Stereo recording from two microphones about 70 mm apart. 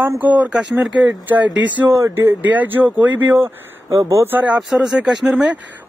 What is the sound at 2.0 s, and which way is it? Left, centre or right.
A man's voice, right.